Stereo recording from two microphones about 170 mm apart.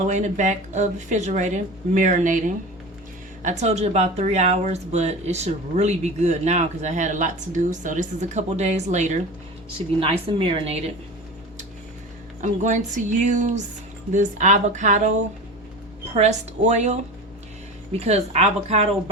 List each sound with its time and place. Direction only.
0.1 s speech: 45° right (ahead or behind)
3.4 s speech: 40° right (ahead or behind)
10.0 s speech: 35° right (ahead or behind)
12.4 s speech: 45° right (ahead or behind)
18.0 s speech: 40° right (ahead or behind)